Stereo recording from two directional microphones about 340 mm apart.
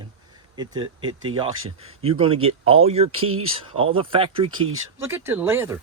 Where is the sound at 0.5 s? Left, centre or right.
Centre.